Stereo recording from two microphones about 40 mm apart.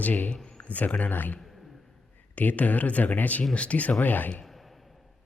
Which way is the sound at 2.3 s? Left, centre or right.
Left.